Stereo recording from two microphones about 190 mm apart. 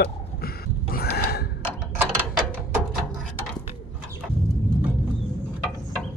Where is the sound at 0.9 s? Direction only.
55° left (ahead or behind).